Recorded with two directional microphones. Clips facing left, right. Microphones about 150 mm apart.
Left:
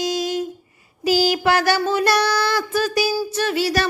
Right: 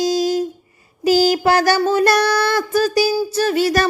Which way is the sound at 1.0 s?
40° right (ahead or behind).